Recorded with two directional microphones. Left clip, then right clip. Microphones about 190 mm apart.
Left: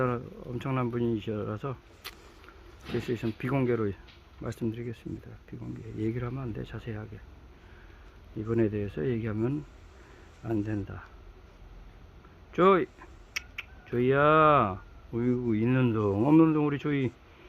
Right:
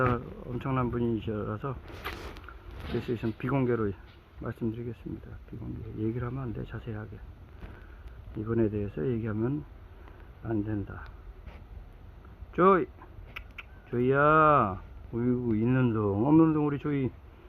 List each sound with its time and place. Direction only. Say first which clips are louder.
0.0 s speech: right 2 dB; 10° left (ahead or behind)
3.1 s speech: even; 10° left (ahead or behind)
6.0 s speech: even; 15° left (ahead or behind)
8.4 s speech: left 1 dB; 15° left (ahead or behind)
12.5 s speech: even; 15° left (ahead or behind)